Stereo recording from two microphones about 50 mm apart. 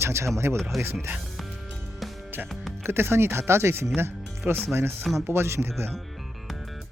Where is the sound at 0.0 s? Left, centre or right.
Right.